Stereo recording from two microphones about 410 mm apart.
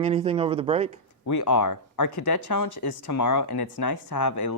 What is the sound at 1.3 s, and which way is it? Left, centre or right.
Speech, left.